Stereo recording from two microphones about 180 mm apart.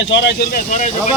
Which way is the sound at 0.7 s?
40° left (ahead or behind).